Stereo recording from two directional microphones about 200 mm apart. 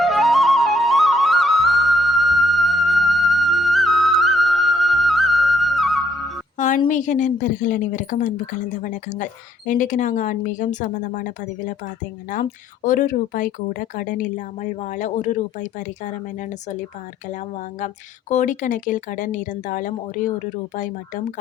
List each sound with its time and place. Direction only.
0.0 s flute: centre (ahead or behind)
6.6 s a woman's voice: 40° left (ahead or behind)
17.7 s a woman's voice: 35° left (ahead or behind)